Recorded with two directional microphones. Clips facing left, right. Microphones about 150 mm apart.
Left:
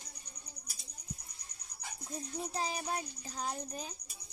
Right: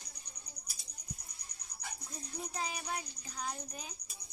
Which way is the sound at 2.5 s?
35° left (ahead or behind).